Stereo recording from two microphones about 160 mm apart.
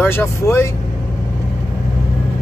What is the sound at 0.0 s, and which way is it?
Speech, 15° left (ahead or behind).